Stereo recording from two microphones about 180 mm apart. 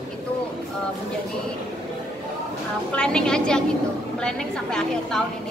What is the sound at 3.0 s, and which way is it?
Speech, 5° left (ahead or behind).